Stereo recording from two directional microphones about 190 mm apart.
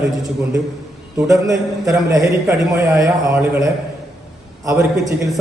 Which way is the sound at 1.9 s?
15° right (ahead or behind).